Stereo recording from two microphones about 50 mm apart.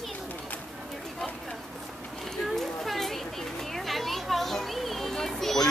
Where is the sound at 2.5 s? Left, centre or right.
Centre.